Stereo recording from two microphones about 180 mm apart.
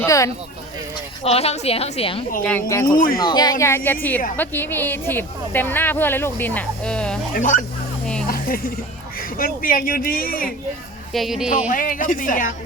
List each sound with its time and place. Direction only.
0.0 s speech: 15° left (ahead or behind)
1.2 s a woman's voice: 35° left (ahead or behind)
2.4 s speech: 10° left (ahead or behind)
2.8 s a man's voice: 50° left (ahead or behind)
3.2 s a woman's voice: 20° left (ahead or behind); by 7.2 s 5° left (ahead or behind)
7.3 s a man's voice: 45° left (ahead or behind)
8.3 s music: 55° left (ahead or behind)
9.4 s a man's voice: 50° left (ahead or behind)
11.1 s a woman's voice: centre (ahead or behind)
11.7 s a man's voice: 50° left (ahead or behind)